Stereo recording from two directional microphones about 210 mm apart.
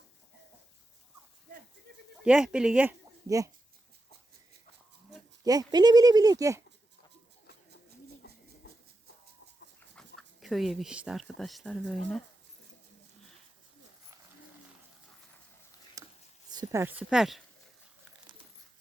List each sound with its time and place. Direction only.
2.2 s speech: 5° right (ahead or behind)
5.4 s speech: 15° right (ahead or behind)
10.2 s speech: centre (ahead or behind)
16.0 s a sound: 15° right (ahead or behind)
16.5 s speech: 15° right (ahead or behind)